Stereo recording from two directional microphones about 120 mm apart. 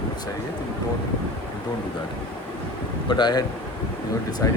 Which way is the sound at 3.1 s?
35° left (ahead or behind).